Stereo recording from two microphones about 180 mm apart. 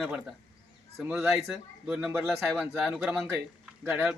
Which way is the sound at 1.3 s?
Centre (ahead or behind).